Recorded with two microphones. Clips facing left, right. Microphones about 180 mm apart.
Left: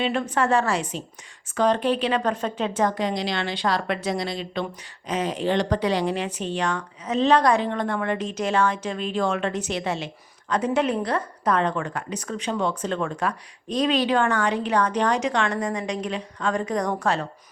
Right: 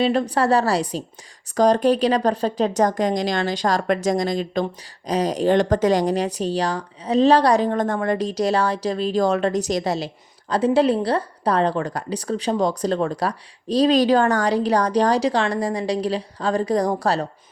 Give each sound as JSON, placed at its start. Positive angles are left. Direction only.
{"t": 0.0, "sound": "a woman's voice", "side_deg": -35}